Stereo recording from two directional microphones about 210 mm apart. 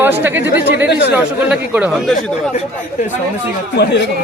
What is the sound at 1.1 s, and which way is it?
A man's voice, 5° right (ahead or behind).